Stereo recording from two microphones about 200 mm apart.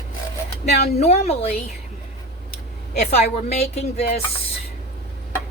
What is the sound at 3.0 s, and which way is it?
Speech, 35° left (ahead or behind).